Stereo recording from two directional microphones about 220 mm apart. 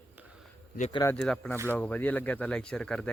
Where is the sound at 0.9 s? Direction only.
15° left (ahead or behind).